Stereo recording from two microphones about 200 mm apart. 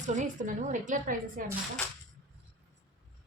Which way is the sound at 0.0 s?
40° right (ahead or behind).